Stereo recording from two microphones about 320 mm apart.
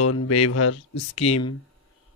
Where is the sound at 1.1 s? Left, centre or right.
Centre.